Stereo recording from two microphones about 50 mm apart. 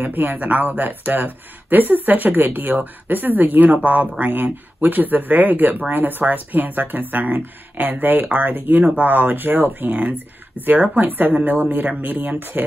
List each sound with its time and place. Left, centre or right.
0.0 s speech: right